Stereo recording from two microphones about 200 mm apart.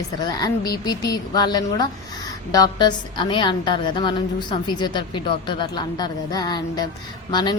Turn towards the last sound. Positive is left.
turn(degrees=20)  # may be behind; listen again after turning